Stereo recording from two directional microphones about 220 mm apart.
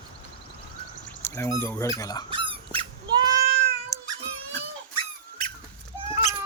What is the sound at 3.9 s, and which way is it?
Cat, 15° left (ahead or behind).